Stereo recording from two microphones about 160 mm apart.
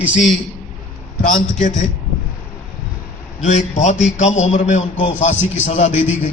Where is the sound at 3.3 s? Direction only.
50° left (ahead or behind).